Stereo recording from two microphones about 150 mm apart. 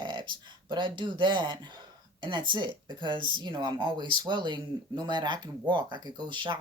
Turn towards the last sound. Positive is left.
turn(degrees=-30)  # may be behind; listen again after turning